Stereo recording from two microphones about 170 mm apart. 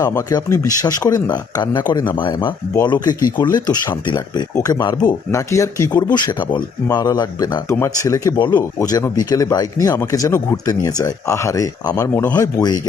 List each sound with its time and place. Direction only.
0.0 s speech: 20° left (ahead or behind)